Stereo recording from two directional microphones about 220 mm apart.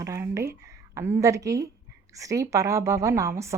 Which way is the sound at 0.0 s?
15° right (ahead or behind).